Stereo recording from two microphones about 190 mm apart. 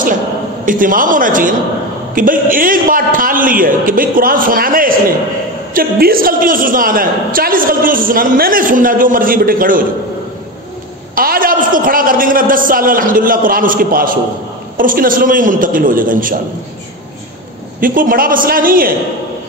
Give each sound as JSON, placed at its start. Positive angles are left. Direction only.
{"t": 0.7, "sound": "a woman's voice", "side_deg": -45}
{"t": 11.1, "sound": "a woman's voice", "side_deg": -50}
{"t": 17.7, "sound": "a woman's voice", "side_deg": -45}